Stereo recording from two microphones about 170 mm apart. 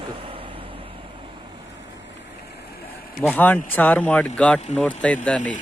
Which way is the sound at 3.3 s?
10° left (ahead or behind).